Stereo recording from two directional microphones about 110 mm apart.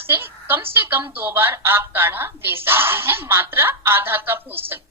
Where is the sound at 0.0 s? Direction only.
20° right (ahead or behind).